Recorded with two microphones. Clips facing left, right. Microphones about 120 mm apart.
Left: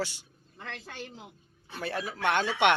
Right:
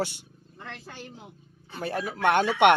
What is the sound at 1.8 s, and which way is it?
Speech, 45° right (ahead or behind).